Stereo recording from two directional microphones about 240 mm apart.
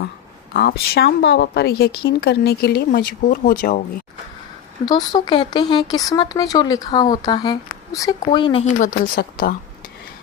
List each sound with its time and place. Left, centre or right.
0.5 s a woman's voice: left
4.9 s speech: centre
8.8 s a woman's voice: left